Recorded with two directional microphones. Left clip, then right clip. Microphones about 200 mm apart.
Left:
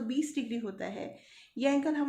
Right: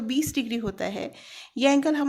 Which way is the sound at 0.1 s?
45° right (ahead or behind).